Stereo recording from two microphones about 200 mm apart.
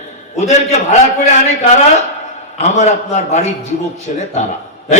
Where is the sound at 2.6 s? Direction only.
35° left (ahead or behind).